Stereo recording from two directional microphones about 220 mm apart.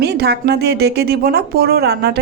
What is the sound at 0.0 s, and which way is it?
Speech, 45° right (ahead or behind).